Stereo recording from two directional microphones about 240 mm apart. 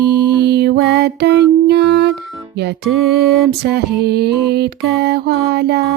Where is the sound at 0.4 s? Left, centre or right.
Right.